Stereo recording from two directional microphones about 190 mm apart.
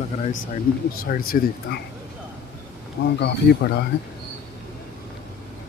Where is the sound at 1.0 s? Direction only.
50° left (ahead or behind).